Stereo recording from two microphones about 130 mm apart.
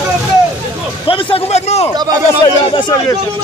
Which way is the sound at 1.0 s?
45° left (ahead or behind).